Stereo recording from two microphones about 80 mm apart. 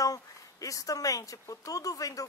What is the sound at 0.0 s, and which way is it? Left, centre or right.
Speech, left.